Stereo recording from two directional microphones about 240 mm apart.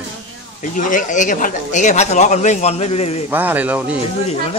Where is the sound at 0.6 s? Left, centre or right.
Left.